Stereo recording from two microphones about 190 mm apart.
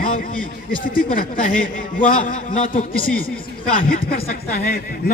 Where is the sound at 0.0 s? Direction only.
45° left (ahead or behind).